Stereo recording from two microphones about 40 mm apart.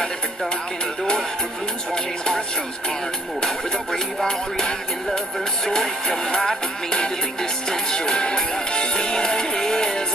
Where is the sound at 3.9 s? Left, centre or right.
Centre.